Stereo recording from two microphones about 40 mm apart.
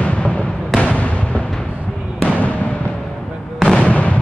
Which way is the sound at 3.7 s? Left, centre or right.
Left.